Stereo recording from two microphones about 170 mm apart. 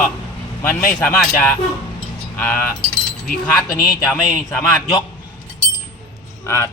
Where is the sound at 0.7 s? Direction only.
55° left (ahead or behind).